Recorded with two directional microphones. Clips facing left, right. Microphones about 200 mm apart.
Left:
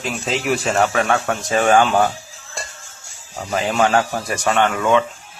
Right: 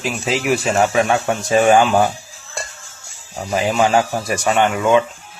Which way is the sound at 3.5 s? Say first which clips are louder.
Right 2 dB; 5° right (ahead or behind).